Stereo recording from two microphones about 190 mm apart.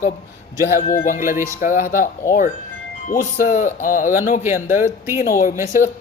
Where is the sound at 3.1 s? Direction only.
45° left (ahead or behind).